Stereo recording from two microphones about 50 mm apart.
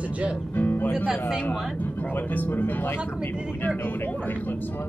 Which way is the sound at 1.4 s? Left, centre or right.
Left.